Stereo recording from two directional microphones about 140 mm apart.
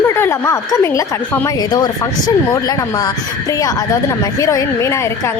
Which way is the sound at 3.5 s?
25° left (ahead or behind).